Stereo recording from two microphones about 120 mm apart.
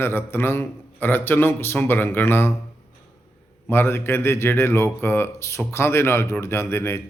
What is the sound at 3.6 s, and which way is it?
Speech, 20° left (ahead or behind).